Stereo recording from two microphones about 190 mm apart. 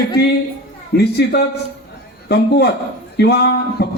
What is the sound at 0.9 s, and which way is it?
Speech, 55° left (ahead or behind).